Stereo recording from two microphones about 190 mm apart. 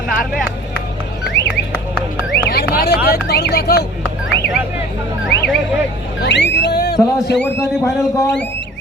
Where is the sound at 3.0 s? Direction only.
55° left (ahead or behind).